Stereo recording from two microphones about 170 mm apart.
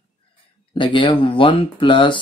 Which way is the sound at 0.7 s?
30° left (ahead or behind).